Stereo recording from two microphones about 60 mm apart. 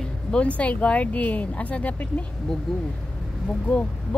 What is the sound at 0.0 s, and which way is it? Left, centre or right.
Speech, centre.